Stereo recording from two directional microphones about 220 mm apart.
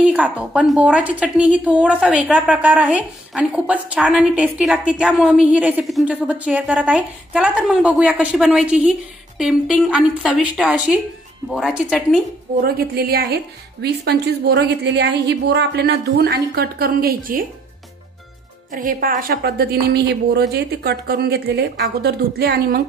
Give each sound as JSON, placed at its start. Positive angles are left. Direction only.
{"t": 0.0, "sound": "a woman's voice", "side_deg": -5}
{"t": 12.6, "sound": "speech", "side_deg": -45}
{"t": 18.7, "sound": "speech", "side_deg": -40}